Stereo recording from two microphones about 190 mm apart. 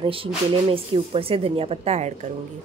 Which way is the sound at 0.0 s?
30° right (ahead or behind).